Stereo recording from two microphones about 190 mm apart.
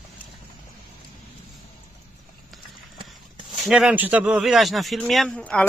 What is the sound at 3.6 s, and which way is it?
Speech, 5° right (ahead or behind).